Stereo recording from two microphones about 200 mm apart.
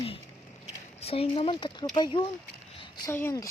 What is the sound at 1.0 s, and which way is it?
Speech, 30° left (ahead or behind).